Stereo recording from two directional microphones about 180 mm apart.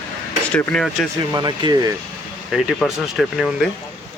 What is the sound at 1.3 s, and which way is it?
Speech, 25° right (ahead or behind).